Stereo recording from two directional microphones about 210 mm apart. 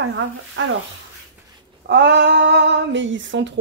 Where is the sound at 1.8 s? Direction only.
55° right (ahead or behind).